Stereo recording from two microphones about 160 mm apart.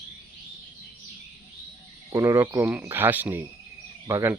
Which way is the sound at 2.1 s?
20° right (ahead or behind).